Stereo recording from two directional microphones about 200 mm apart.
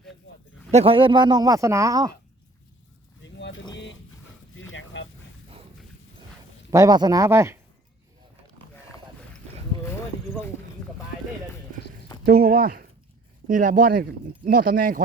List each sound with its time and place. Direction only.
0.7 s a man's voice: 30° right (ahead or behind)
3.2 s vehicle: 60° left (ahead or behind)
4.5 s a sound: 80° left
6.7 s speech: 15° right (ahead or behind)
12.2 s speech: 50° right (ahead or behind)